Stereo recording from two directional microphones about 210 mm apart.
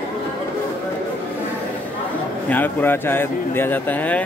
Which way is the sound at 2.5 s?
10° left (ahead or behind).